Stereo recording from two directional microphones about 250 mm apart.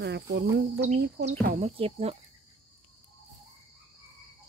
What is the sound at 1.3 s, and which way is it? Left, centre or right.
Speech, right.